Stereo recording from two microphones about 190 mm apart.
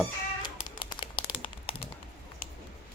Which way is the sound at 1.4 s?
30° left (ahead or behind).